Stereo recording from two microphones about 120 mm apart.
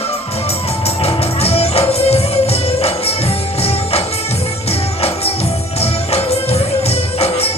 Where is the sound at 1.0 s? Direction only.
55° left (ahead or behind).